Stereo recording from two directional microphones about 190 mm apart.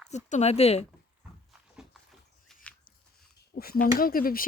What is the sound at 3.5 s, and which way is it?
Speech, 50° left (ahead or behind).